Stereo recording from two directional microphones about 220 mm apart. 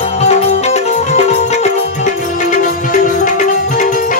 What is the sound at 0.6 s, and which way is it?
Music, 30° left (ahead or behind).